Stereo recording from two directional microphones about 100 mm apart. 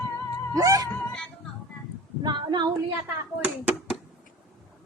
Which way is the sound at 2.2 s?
45° right (ahead or behind).